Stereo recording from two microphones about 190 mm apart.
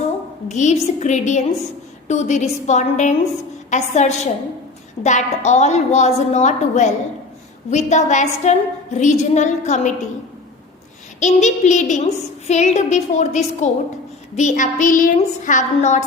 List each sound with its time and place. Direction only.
0.4 s a woman's voice: 40° left (ahead or behind)
11.2 s a woman's voice: 40° left (ahead or behind)